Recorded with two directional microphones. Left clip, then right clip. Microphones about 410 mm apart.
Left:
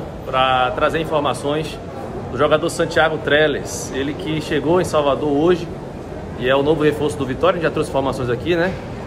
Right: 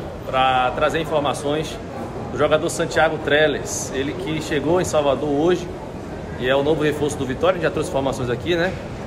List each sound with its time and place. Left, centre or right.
0.3 s a man's voice: centre